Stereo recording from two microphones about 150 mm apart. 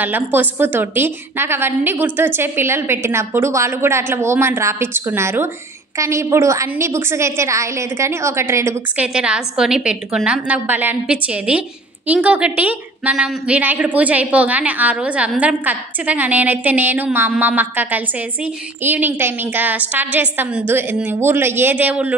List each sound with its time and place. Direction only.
0.0 s a woman's voice: 10° right (ahead or behind)
9.0 s a woman's voice: 5° right (ahead or behind)